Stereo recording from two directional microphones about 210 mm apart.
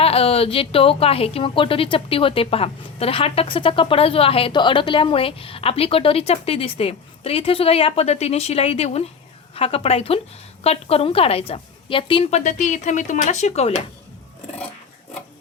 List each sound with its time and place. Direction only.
0.0 s a woman's voice: 30° left (ahead or behind)